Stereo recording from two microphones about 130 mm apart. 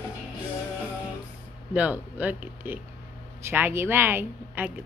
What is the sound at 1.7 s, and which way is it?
Speech, 10° right (ahead or behind).